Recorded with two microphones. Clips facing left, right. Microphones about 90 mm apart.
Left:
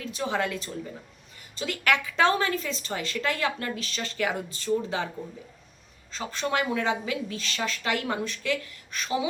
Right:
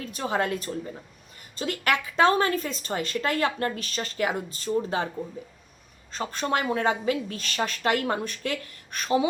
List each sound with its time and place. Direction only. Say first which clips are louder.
0.0 s a woman's voice: right 1 dB; 40° right (ahead or behind)
6.1 s a woman's voice: right 2 dB; 45° right (ahead or behind)